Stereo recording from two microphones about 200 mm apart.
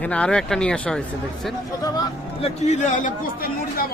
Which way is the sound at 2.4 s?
35° left (ahead or behind).